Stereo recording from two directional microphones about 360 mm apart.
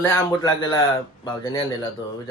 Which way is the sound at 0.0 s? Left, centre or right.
Centre.